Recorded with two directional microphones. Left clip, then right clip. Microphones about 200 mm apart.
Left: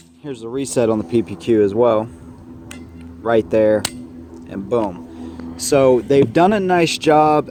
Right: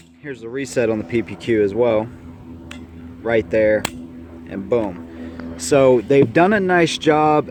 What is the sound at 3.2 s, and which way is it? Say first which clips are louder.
Speech: left 2 dB; 25° left (ahead or behind).